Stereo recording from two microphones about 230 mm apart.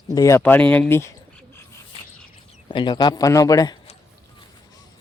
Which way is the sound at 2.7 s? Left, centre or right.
Left.